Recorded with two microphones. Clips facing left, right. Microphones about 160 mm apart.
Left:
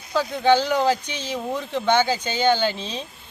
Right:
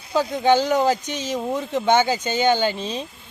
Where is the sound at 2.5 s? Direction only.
15° right (ahead or behind).